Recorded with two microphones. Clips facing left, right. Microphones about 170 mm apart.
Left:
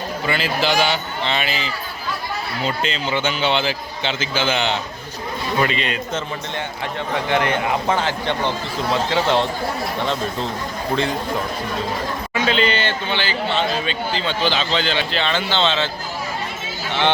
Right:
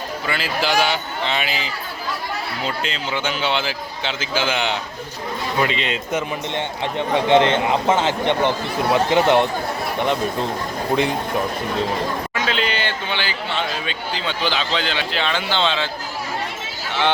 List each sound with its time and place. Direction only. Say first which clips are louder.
0.3 s a man's voice: left 2 dB; 5° right (ahead or behind)
7.3 s a man's voice: right 4 dB; 25° right (ahead or behind)
12.3 s a man's voice: left 3 dB; 5° right (ahead or behind)